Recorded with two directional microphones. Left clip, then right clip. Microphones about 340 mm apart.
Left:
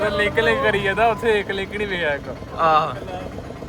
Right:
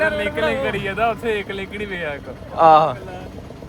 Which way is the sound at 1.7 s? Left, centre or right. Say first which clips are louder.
Left 5 dB; centre.